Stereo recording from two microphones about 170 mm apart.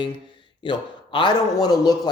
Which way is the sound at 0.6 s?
30° left (ahead or behind).